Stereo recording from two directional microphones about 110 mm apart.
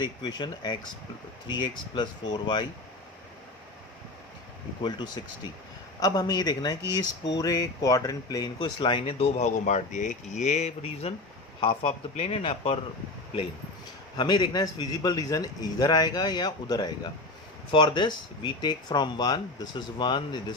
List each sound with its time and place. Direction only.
0.0 s a man's voice: 40° left (ahead or behind)
4.8 s a man's voice: 45° left (ahead or behind); by 11.1 s 80° left
11.6 s speech: 55° left (ahead or behind)
14.2 s a man's voice: 40° left (ahead or behind)